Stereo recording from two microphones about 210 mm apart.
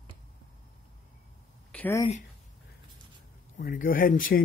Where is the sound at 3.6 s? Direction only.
40° left (ahead or behind).